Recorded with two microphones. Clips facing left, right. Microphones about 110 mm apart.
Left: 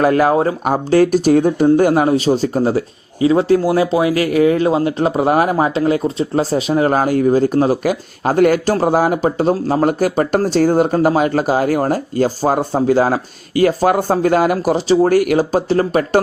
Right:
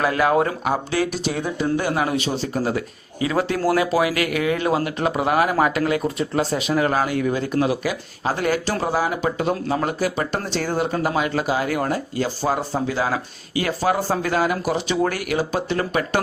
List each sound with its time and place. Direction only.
0.0 s a man's voice: 40° left (ahead or behind)
0.6 s a man's voice: 45° left (ahead or behind)
5.5 s speech: 30° left (ahead or behind)